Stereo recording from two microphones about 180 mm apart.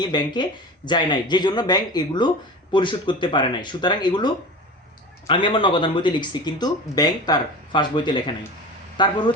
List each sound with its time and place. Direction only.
0.0 s speech: 25° left (ahead or behind)
5.3 s speech: 30° left (ahead or behind)